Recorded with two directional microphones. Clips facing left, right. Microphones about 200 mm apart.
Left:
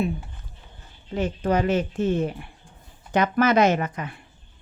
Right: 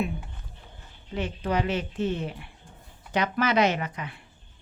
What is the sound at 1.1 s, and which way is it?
Speech, 45° left (ahead or behind).